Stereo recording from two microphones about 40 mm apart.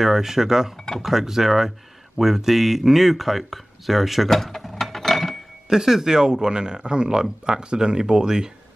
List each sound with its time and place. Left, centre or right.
0.0 s speech: centre
4.3 s mechanisms: centre
5.7 s speech: centre